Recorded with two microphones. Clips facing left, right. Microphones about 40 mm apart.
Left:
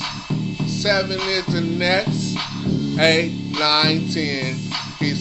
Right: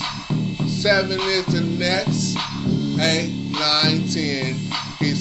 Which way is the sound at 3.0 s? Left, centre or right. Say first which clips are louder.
Left 7 dB; left.